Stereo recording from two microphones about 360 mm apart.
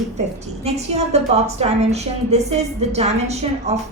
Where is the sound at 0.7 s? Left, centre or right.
Centre.